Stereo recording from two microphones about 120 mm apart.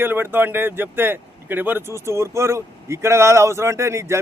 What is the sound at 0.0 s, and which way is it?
Speech, 20° right (ahead or behind).